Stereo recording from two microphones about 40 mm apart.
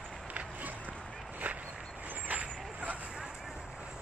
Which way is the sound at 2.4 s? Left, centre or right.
Right.